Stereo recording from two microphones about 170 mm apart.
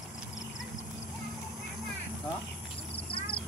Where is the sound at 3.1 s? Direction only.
30° left (ahead or behind).